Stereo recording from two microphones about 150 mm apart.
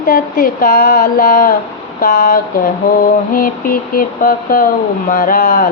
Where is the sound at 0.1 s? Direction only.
70° left (ahead or behind).